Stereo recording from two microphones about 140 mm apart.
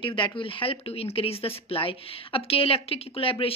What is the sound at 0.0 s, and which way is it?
Speech, 35° left (ahead or behind).